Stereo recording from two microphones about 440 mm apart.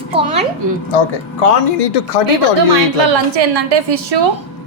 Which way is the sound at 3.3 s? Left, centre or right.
Right.